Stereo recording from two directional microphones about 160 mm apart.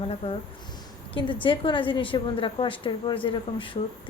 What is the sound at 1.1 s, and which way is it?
A woman's voice, 30° left (ahead or behind).